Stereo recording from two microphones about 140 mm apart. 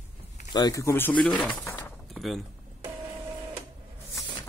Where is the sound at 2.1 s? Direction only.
Centre (ahead or behind).